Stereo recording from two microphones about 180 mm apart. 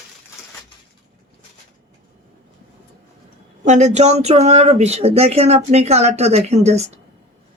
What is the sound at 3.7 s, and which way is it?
Speech, 40° right (ahead or behind).